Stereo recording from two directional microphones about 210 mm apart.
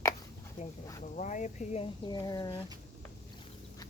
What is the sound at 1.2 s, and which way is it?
Speech, 35° left (ahead or behind).